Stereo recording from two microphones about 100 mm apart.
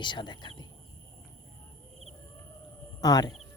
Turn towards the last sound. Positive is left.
turn(degrees=40)  # may be behind; listen again after turning